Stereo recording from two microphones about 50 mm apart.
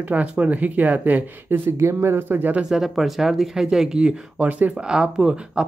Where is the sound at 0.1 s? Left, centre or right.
Right.